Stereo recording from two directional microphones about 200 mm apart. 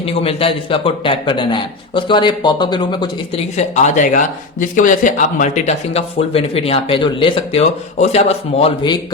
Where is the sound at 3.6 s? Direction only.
40° left (ahead or behind).